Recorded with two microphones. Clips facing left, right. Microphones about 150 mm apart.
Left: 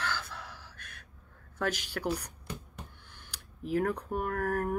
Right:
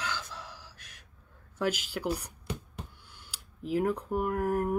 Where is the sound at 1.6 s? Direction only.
10° right (ahead or behind).